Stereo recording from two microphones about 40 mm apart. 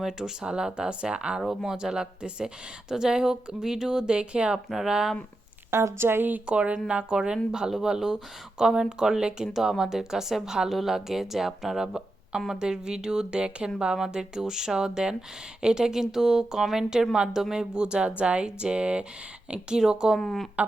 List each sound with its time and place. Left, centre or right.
0.0 s speech: centre
1.4 s speech: centre
1.7 s speech: centre
4.5 s speech: centre
5.7 s a woman's voice: right
6.4 s speech: right; by 11.9 s centre
12.5 s speech: centre
17.8 s speech: right
19.7 s speech: centre
20.1 s speech: centre